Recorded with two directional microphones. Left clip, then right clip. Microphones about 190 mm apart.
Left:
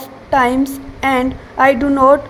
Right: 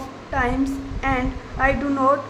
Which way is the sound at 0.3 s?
35° left (ahead or behind).